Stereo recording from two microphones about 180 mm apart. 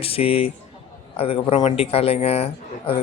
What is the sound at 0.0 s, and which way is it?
A man's voice, 30° left (ahead or behind).